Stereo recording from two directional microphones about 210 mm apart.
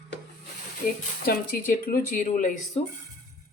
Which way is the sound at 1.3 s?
45° left (ahead or behind).